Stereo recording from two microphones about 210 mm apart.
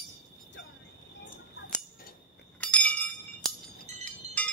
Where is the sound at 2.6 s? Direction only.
5° left (ahead or behind).